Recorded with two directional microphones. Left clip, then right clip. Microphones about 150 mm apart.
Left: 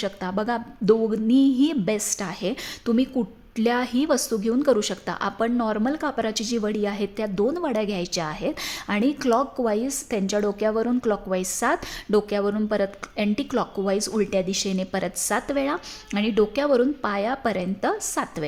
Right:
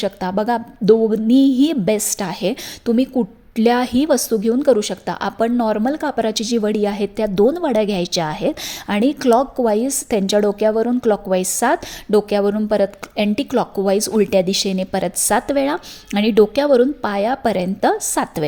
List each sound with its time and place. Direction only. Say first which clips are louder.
0.0 s a woman's voice: right 7 dB; 25° right (ahead or behind)